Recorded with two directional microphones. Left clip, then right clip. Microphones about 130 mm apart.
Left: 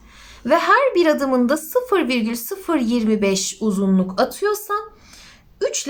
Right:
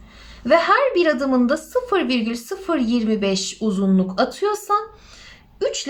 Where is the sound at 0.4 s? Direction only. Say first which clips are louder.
Even; 45° left (ahead or behind).